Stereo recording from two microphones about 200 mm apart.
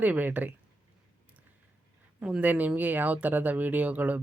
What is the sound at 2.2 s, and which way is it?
Speech, 5° right (ahead or behind).